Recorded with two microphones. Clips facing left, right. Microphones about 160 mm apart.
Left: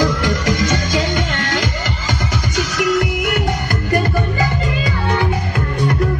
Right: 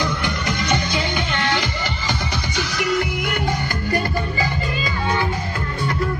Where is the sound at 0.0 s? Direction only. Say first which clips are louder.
Left 6 dB; 90° left.